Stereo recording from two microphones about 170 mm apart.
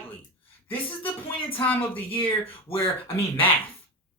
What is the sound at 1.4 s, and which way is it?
Speech, 30° left (ahead or behind).